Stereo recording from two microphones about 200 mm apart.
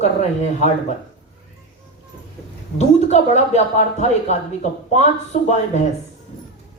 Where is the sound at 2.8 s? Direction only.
35° left (ahead or behind).